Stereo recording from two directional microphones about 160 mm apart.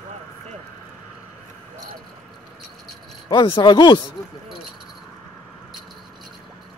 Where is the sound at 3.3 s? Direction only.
30° left (ahead or behind).